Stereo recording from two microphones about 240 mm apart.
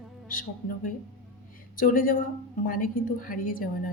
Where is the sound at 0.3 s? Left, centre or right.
Left.